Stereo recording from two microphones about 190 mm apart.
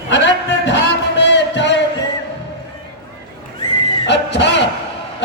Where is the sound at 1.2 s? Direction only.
70° left (ahead or behind).